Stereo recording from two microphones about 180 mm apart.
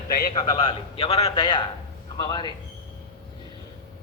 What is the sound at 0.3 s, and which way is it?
A man's voice, 25° left (ahead or behind).